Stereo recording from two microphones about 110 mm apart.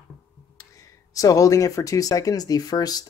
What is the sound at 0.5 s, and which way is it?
Speech, 30° left (ahead or behind).